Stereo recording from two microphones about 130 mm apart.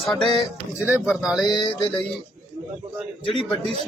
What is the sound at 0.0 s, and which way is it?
Speech, centre (ahead or behind).